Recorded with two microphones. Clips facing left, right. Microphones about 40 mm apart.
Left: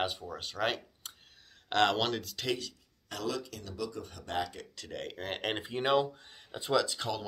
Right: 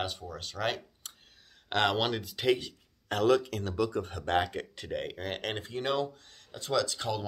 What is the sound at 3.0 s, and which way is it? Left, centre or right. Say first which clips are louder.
Speech: right 11 dB; right.